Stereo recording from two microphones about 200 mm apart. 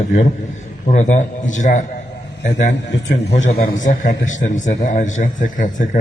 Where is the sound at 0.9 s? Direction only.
35° left (ahead or behind).